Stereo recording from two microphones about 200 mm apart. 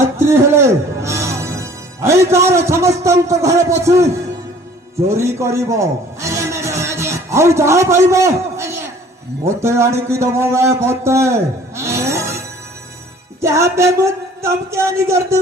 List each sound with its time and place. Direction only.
0.2 s speech: 15° right (ahead or behind)
5.0 s music: 15° right (ahead or behind)
9.6 s speech: 15° right (ahead or behind)
11.8 s a sound: 15° right (ahead or behind)
13.4 s speech: 15° right (ahead or behind)